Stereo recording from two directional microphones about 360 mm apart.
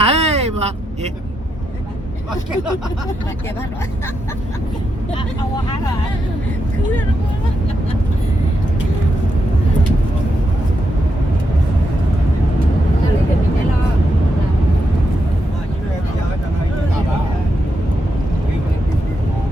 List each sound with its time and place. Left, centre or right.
0.0 s vehicle: centre